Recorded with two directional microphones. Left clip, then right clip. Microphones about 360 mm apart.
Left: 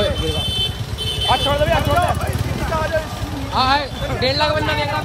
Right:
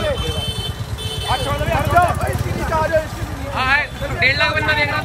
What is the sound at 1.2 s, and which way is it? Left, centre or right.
Vehicle, left.